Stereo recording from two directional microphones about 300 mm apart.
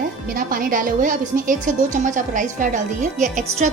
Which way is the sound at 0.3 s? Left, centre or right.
Right.